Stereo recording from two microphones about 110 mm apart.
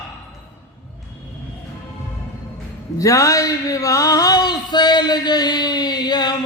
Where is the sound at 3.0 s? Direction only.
30° left (ahead or behind).